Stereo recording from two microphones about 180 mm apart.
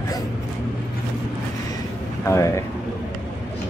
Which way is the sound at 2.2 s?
15° left (ahead or behind).